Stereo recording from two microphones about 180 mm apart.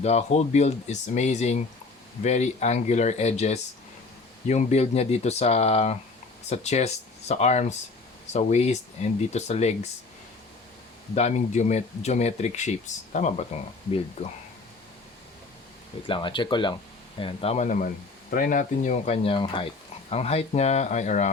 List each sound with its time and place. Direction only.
0.0 s speech: 35° left (ahead or behind)
11.1 s speech: 40° left (ahead or behind)
16.0 s speech: 25° left (ahead or behind)